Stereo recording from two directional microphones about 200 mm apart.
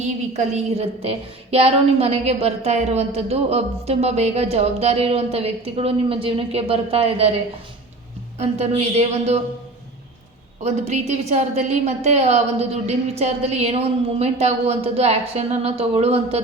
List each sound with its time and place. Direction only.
0.0 s a woman's voice: 35° right (ahead or behind)
8.4 s a woman's voice: 30° right (ahead or behind)
10.6 s a woman's voice: 35° right (ahead or behind)